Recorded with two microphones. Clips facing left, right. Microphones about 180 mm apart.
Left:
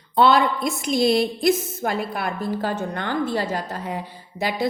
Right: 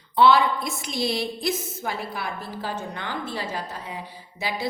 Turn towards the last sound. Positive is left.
turn(degrees=50)  # may be behind; listen again after turning